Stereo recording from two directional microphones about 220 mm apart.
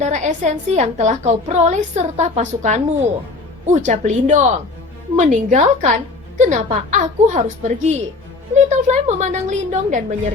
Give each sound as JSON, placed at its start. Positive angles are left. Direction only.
{"t": 0.0, "sound": "a woman's voice", "side_deg": -35}